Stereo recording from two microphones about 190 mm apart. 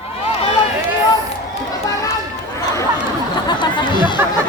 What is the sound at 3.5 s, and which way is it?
Music, 25° left (ahead or behind).